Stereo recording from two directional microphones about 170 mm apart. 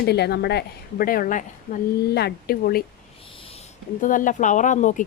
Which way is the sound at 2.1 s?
70° left (ahead or behind).